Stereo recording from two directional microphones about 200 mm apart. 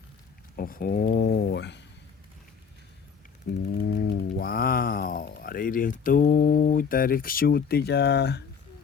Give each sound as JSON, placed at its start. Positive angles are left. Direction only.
{"t": 0.5, "sound": "speech", "side_deg": 45}
{"t": 3.5, "sound": "speech", "side_deg": 50}